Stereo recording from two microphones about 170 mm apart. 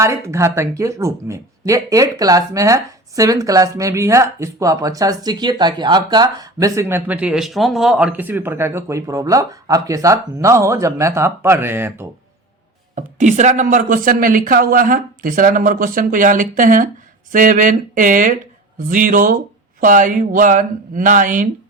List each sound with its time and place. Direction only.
0.0 s speech: 15° right (ahead or behind)
13.0 s speech: 45° right (ahead or behind)